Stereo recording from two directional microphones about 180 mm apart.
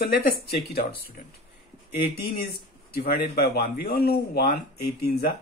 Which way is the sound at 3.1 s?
55° left (ahead or behind).